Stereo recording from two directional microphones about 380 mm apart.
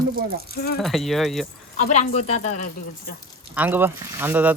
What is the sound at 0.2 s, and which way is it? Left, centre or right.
Speech, right.